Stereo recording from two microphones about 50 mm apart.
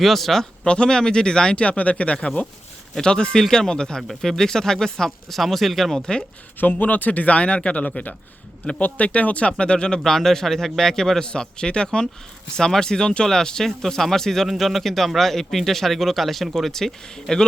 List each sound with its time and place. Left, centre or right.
0.0 s speech: centre
0.6 s speech: centre
6.0 s speech: centre
6.6 s speech: left; by 10.0 s centre
10.0 s speech: centre